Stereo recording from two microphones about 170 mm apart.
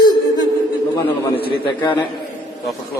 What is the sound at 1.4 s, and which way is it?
Child singing, 30° left (ahead or behind).